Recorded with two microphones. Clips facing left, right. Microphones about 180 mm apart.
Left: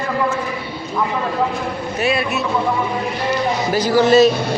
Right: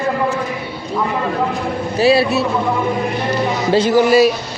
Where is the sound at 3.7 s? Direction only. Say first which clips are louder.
Right 4 dB; 25° right (ahead or behind).